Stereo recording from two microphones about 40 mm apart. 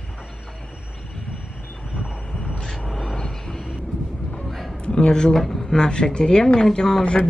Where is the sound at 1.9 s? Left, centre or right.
Right.